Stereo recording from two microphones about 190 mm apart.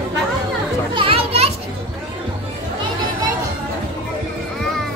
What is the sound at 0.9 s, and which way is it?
Children playing, 30° right (ahead or behind).